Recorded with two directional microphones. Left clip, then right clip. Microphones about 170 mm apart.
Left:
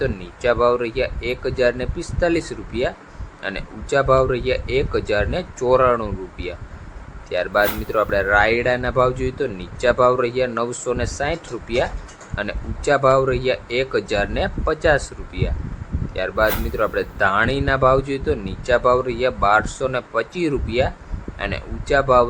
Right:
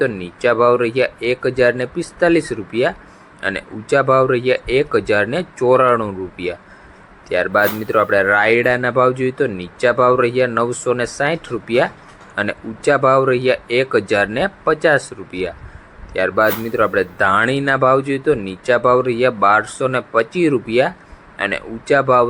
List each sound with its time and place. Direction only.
0.0 s speech: 20° right (ahead or behind)